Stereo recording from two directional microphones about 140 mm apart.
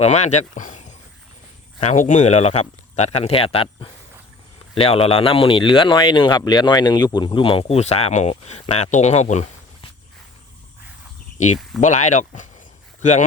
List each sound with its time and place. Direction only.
0.0 s speech: 55° left (ahead or behind)
11.3 s speech: 60° left (ahead or behind)